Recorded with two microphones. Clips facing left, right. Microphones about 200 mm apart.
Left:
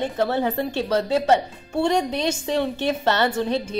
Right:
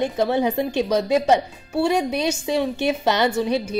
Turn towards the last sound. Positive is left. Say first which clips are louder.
# right 2 dB
turn(degrees=-10)  # may be behind; listen again after turning